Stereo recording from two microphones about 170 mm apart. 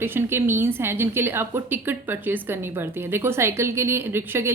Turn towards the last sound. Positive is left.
turn(degrees=-15)  # may be behind; listen again after turning